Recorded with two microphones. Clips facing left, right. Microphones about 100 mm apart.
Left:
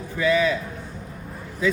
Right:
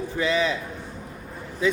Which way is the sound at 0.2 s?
25° right (ahead or behind).